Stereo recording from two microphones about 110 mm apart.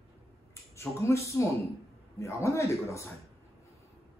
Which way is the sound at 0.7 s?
25° left (ahead or behind).